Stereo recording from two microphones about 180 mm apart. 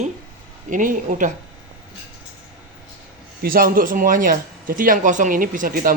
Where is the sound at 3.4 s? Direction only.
55° right (ahead or behind).